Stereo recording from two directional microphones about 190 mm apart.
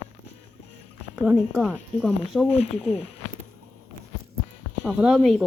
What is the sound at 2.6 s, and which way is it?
Speech, 35° left (ahead or behind).